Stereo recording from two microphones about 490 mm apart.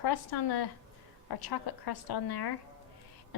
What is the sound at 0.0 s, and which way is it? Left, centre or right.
A woman's voice, left.